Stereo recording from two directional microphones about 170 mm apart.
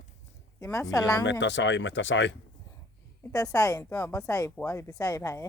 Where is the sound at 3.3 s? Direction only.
20° left (ahead or behind).